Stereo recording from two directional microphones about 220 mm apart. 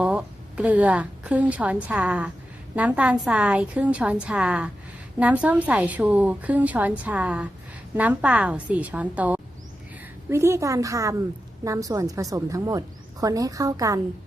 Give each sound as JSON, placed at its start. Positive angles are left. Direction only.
{"t": 0.0, "sound": "a woman's voice", "side_deg": -5}